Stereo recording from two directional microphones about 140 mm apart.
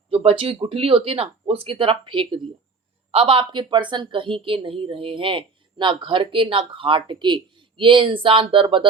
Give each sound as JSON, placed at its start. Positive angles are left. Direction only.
{"t": 0.1, "sound": "a woman's voice", "side_deg": -40}